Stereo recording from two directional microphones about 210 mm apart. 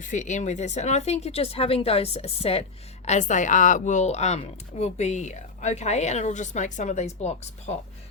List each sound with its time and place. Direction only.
0.0 s a woman's voice: 35° left (ahead or behind)